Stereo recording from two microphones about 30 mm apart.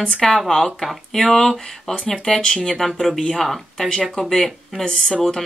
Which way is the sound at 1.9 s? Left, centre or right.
Left.